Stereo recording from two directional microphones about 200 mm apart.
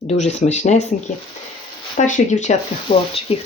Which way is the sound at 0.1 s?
35° left (ahead or behind).